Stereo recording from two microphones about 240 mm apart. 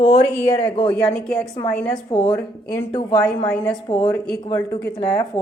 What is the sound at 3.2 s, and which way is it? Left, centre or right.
Speech, centre.